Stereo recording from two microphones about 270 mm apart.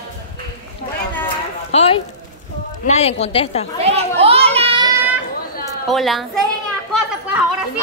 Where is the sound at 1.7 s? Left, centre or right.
Left.